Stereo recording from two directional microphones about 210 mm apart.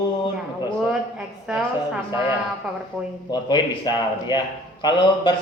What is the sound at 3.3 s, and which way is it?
Speech, 20° left (ahead or behind).